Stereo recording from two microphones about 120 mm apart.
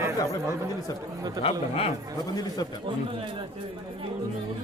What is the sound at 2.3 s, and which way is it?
Speech, 35° left (ahead or behind).